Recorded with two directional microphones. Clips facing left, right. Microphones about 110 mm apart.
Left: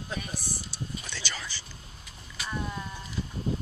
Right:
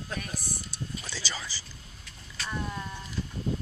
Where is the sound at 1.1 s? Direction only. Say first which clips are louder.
Right 1 dB; 10° right (ahead or behind).